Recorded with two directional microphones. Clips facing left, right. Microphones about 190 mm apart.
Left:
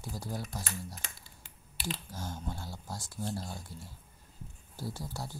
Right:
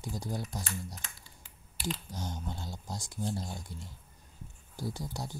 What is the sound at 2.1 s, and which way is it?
Speech, 20° right (ahead or behind).